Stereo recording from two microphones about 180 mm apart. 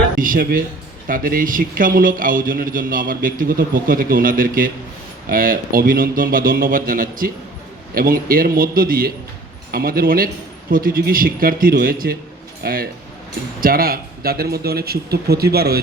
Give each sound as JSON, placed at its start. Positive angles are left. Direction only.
{"t": 0.2, "sound": "a man's voice", "side_deg": -50}